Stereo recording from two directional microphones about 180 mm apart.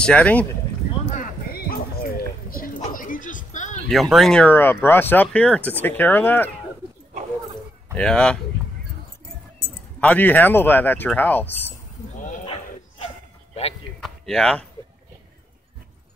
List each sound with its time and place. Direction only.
0.0 s speech: 5° left (ahead or behind)
1.1 s a sound: 50° left (ahead or behind)
3.9 s speech: centre (ahead or behind)
7.9 s speech: 5° left (ahead or behind)
9.9 s speech: 10° left (ahead or behind)
14.0 s a sound: 5° left (ahead or behind)